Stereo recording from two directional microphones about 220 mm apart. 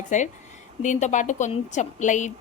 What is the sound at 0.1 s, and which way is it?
A woman's voice, 35° left (ahead or behind).